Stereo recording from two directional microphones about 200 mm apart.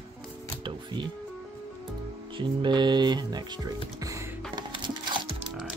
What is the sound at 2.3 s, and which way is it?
Music, 25° right (ahead or behind).